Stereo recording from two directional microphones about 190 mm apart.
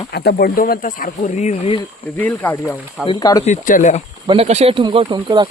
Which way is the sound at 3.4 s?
45° left (ahead or behind).